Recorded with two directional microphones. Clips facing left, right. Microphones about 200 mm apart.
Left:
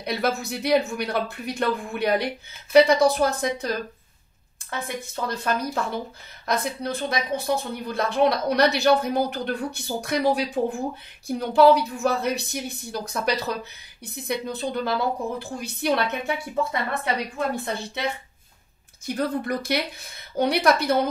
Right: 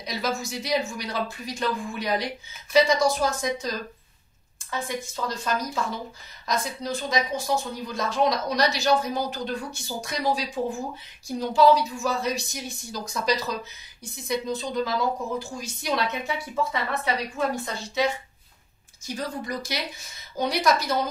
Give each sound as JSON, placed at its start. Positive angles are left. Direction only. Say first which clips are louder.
{"t": 0.0, "sound": "speech", "louder": "left 4 dB", "side_deg": 60}
{"t": 17.7, "sound": "speech", "louder": "right 5 dB", "side_deg": 60}
{"t": 19.0, "sound": "speech", "louder": "left 6 dB", "side_deg": 60}